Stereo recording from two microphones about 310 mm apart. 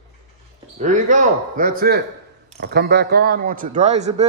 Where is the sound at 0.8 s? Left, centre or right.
Right.